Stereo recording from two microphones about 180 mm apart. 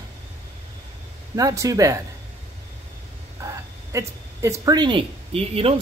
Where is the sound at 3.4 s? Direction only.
15° right (ahead or behind).